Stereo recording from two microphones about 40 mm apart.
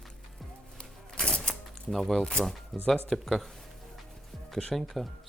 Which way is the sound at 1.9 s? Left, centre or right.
Centre.